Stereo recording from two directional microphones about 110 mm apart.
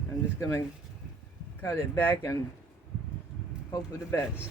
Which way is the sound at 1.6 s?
20° left (ahead or behind).